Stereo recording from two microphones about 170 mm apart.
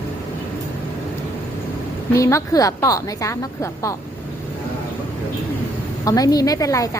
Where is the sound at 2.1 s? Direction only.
20° left (ahead or behind).